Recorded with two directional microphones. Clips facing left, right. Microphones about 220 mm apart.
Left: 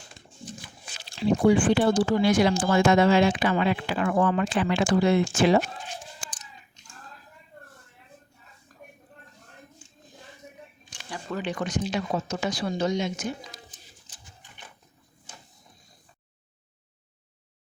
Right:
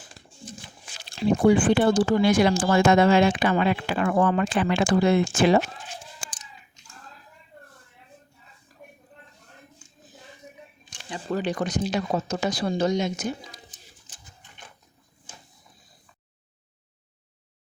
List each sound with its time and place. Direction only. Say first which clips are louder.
1.2 s speech: right 1 dB; 50° right (ahead or behind)
11.3 s speech: right 4 dB; 35° right (ahead or behind)